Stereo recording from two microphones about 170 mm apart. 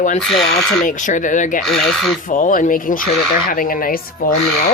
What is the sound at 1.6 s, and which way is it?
Speech, centre (ahead or behind).